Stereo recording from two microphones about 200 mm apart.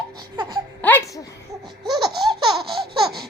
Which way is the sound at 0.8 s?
15° left (ahead or behind).